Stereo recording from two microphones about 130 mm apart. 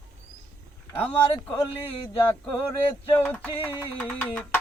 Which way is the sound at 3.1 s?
15° left (ahead or behind).